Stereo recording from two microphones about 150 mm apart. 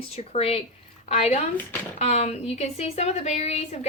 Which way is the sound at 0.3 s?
40° left (ahead or behind).